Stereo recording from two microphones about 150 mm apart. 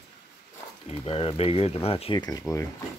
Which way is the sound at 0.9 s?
40° left (ahead or behind).